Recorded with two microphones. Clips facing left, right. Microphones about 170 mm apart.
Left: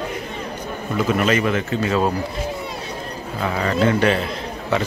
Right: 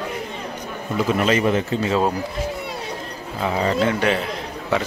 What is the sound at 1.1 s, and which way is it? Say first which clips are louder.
Speech: right 1 dB; 25° right (ahead or behind).